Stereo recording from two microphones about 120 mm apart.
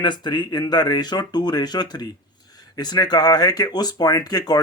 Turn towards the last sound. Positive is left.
turn(degrees=35)  # may be behind; listen again after turning